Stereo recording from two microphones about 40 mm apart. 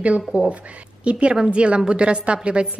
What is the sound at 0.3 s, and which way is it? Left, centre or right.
Speech, right.